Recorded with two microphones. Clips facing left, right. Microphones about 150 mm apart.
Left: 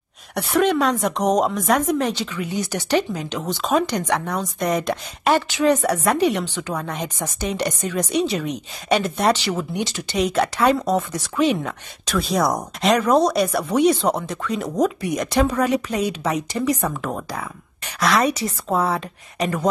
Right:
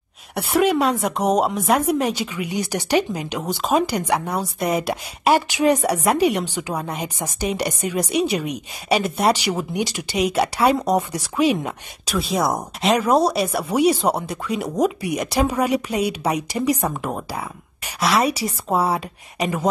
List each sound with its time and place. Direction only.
0.6 s speech: 5° right (ahead or behind)
12.5 s speech: 30° right (ahead or behind)
13.0 s speech: 10° right (ahead or behind)